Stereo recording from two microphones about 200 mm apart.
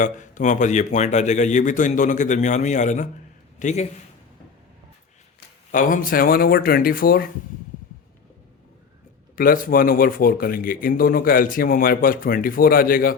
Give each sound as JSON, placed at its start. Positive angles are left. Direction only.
{"t": 0.0, "sound": "a man's voice", "side_deg": 40}
{"t": 5.7, "sound": "speech", "side_deg": 45}
{"t": 9.3, "sound": "speech", "side_deg": 45}